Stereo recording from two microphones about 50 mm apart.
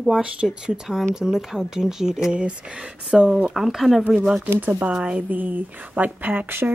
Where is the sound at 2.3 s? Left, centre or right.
Right.